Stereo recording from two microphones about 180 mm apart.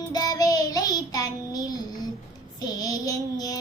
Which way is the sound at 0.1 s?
20° left (ahead or behind).